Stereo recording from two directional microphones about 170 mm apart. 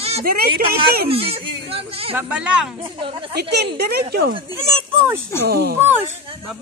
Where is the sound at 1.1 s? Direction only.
35° right (ahead or behind).